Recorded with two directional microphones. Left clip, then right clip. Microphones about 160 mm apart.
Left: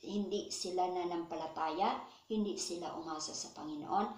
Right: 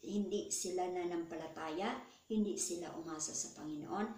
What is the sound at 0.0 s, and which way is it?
A woman's voice, 20° right (ahead or behind).